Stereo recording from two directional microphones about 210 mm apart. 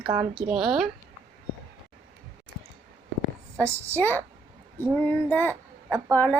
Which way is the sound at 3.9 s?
10° left (ahead or behind).